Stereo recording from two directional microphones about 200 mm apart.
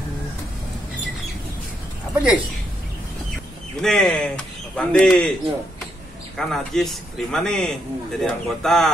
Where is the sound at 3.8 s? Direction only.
Centre (ahead or behind).